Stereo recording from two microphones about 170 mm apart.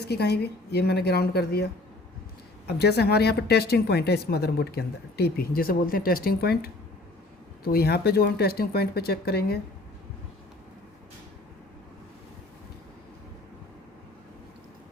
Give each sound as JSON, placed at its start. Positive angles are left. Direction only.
{"t": 0.1, "sound": "speech", "side_deg": 70}